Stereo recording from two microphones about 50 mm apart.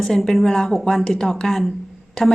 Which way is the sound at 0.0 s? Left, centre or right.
Centre.